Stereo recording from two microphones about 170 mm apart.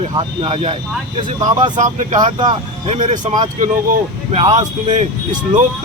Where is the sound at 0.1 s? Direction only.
30° right (ahead or behind).